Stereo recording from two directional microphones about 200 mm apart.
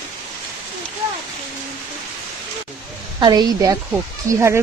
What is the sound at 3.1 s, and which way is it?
A woman's voice, 20° right (ahead or behind).